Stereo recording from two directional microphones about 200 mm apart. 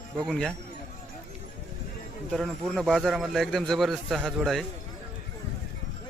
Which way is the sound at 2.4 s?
Centre (ahead or behind).